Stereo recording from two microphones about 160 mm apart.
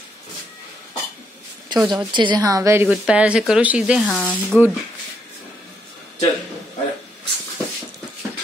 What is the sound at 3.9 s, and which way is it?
Speech, 10° left (ahead or behind).